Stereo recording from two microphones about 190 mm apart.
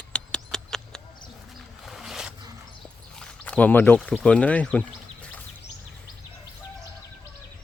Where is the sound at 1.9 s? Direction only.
Centre (ahead or behind).